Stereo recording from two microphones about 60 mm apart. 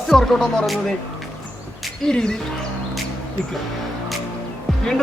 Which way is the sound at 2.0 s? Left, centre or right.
Centre.